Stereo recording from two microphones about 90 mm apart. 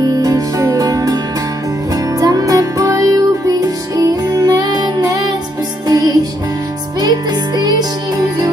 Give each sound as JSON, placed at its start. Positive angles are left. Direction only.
{"t": 0.2, "sound": "music", "side_deg": -40}